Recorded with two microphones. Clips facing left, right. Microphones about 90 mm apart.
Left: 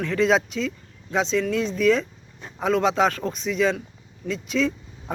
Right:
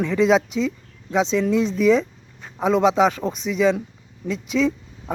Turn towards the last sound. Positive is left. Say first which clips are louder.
# right 4 dB
turn(degrees=-10)  # may be behind; listen again after turning